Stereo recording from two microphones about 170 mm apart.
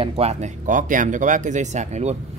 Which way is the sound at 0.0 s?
35° right (ahead or behind).